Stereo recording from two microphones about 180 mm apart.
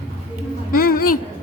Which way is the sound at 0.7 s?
55° left (ahead or behind).